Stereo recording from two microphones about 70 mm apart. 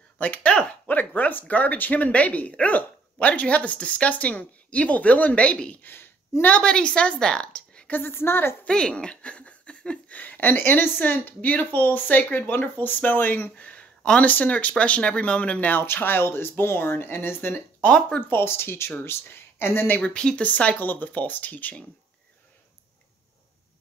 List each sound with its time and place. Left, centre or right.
0.2 s speech: left
6.4 s a woman's voice: centre
7.9 s speech: left
8.6 s speech: centre
15.8 s speech: left
17.7 s speech: centre
18.3 s speech: left
20.0 s speech: centre